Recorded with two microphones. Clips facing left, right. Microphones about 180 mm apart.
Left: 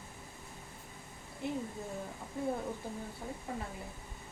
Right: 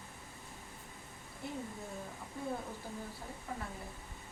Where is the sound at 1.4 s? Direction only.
20° left (ahead or behind).